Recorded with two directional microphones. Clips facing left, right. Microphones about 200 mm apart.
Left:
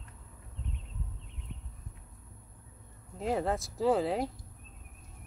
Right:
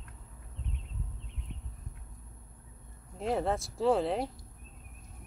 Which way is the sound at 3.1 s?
Centre (ahead or behind).